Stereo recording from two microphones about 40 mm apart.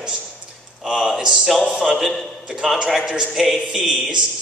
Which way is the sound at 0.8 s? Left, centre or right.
Centre.